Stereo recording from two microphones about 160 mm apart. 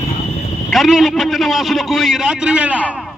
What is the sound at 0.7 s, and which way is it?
A man's voice, centre (ahead or behind).